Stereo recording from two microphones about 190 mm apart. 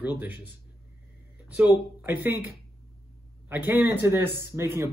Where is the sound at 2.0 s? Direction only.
10° right (ahead or behind).